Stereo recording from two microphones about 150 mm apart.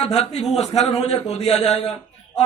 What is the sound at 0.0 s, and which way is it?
A man's voice, 45° left (ahead or behind).